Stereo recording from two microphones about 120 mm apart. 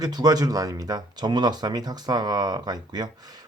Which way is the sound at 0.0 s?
35° right (ahead or behind).